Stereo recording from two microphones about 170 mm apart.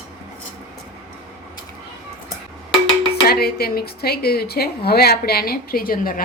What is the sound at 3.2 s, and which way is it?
Speech, 65° left (ahead or behind).